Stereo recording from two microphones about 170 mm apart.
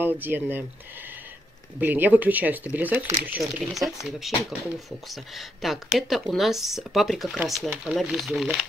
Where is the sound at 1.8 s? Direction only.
10° right (ahead or behind).